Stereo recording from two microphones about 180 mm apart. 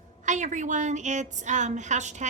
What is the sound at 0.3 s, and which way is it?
A woman's voice, 40° right (ahead or behind).